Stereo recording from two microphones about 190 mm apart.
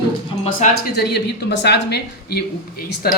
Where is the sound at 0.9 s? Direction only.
60° left (ahead or behind).